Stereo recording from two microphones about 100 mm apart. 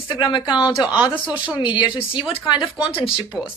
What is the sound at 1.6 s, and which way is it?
Speech, 55° left (ahead or behind).